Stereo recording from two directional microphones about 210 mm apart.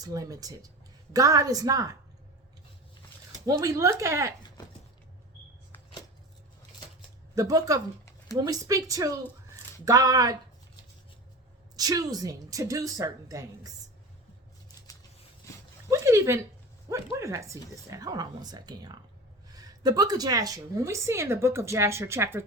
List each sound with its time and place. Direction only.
0.0 s speech: 15° right (ahead or behind)
3.4 s speech: 15° right (ahead or behind)
7.3 s speech: 15° right (ahead or behind)
11.8 s speech: 15° right (ahead or behind)
15.9 s a sound: 15° right (ahead or behind)
16.9 s speech: 15° right (ahead or behind)